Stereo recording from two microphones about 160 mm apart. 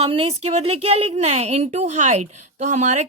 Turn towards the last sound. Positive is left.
turn(degrees=-45)  # may be behind; listen again after turning